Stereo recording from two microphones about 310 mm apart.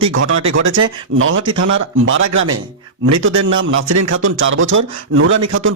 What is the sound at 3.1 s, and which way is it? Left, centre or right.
Speech, right.